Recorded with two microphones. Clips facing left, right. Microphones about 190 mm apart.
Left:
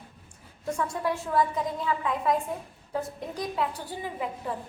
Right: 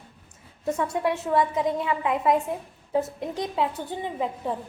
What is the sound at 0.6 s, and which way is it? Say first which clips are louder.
Speech: right 4 dB; 20° right (ahead or behind).